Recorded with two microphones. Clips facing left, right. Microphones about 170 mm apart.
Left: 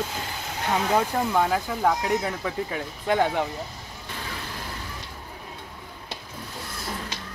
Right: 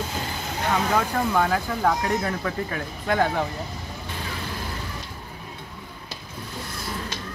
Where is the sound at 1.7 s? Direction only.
5° left (ahead or behind).